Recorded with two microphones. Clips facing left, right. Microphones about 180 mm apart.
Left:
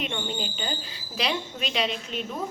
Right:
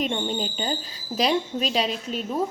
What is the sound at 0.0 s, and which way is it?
A woman's voice, 35° right (ahead or behind).